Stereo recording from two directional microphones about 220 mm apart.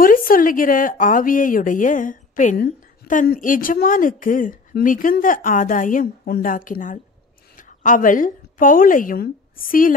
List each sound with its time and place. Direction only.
0.0 s a woman's voice: 40° left (ahead or behind)